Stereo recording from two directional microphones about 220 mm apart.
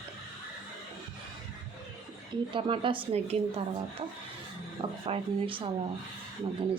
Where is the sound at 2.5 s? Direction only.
25° right (ahead or behind).